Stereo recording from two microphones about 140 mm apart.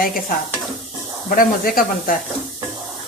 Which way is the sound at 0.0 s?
90° left.